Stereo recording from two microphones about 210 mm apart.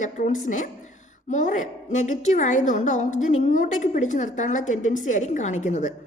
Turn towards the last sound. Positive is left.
turn(degrees=35)  # may be behind; listen again after turning